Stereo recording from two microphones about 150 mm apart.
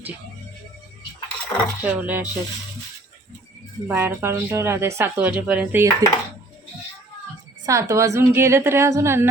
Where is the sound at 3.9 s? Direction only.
15° right (ahead or behind).